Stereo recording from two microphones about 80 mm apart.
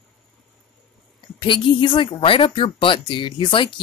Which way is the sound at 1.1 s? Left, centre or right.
Left.